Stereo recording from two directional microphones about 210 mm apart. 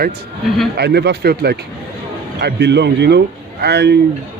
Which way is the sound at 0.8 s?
50° right (ahead or behind).